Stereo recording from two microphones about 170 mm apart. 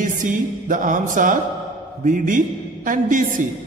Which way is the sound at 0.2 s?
50° right (ahead or behind).